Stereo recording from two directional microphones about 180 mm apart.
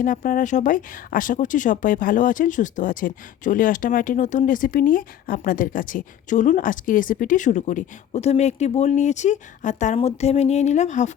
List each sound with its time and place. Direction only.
0.0 s speech: 50° left (ahead or behind)